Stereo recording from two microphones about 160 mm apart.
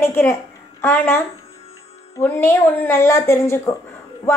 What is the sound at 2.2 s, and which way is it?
A woman's voice, 15° left (ahead or behind).